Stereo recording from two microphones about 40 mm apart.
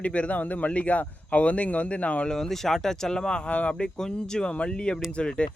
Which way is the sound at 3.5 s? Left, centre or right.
Left.